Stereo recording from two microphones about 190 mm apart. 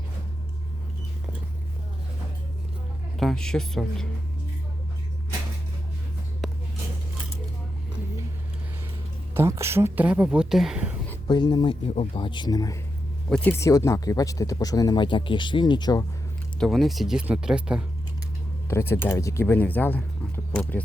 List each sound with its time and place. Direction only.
3.2 s speech: centre (ahead or behind)
6.4 s a sound: centre (ahead or behind)
9.3 s speech: 15° right (ahead or behind)
11.3 s speech: 25° left (ahead or behind)
13.3 s speech: 10° left (ahead or behind)
16.6 s speech: centre (ahead or behind)
18.7 s speech: 10° left (ahead or behind)